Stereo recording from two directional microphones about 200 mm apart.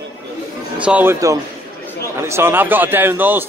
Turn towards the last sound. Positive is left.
turn(degrees=-10)  # may be behind; listen again after turning